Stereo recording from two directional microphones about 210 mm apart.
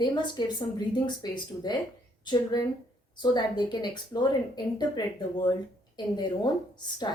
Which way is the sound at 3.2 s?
20° left (ahead or behind).